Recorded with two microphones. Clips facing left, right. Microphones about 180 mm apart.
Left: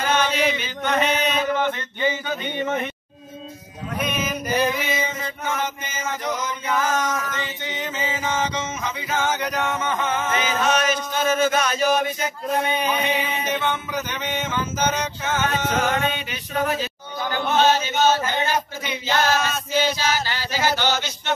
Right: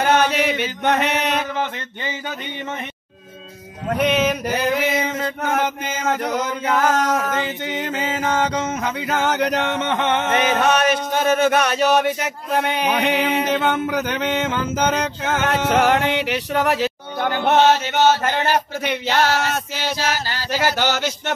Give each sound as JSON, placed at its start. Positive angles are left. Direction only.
{"t": 0.0, "sound": "chant", "side_deg": -65}
{"t": 3.9, "sound": "mantra", "side_deg": -75}
{"t": 17.5, "sound": "chant", "side_deg": -70}